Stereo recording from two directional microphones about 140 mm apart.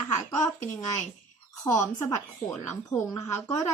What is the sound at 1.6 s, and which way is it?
A woman's voice, 20° left (ahead or behind).